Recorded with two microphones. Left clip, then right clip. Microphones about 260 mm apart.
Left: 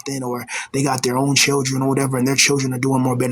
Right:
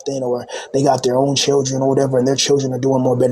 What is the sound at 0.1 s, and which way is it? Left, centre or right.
Speech, left.